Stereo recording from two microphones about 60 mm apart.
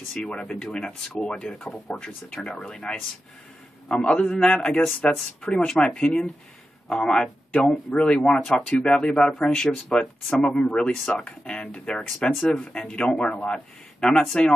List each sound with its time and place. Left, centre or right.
0.1 s speech: centre
9.7 s speech: centre